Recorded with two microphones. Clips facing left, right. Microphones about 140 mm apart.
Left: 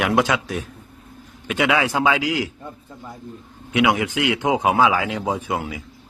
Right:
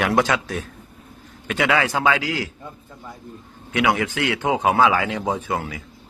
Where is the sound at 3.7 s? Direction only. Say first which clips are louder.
Left 2 dB; 15° left (ahead or behind).